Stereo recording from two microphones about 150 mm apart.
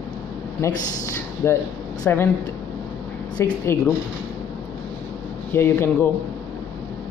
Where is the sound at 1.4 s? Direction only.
15° left (ahead or behind).